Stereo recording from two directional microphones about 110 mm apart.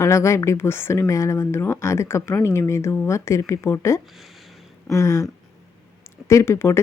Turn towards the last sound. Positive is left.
turn(degrees=25)  # may be behind; listen again after turning